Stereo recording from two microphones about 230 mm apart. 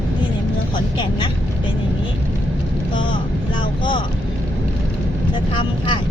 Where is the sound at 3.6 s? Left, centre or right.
Left.